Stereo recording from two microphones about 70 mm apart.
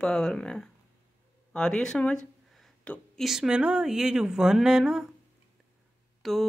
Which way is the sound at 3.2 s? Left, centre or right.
Centre.